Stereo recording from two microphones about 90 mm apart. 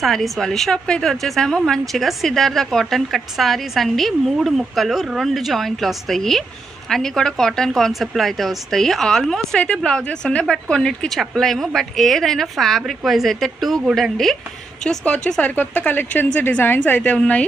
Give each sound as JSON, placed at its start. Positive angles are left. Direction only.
{"t": 0.0, "sound": "a woman's voice", "side_deg": 5}